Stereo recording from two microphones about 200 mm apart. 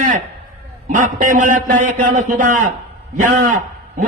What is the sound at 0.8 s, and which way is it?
A man's voice, 40° right (ahead or behind).